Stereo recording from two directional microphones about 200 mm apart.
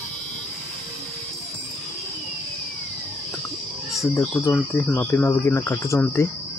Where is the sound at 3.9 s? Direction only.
10° left (ahead or behind).